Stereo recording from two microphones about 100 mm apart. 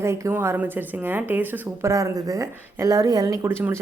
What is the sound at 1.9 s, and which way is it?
A woman's voice, 35° right (ahead or behind).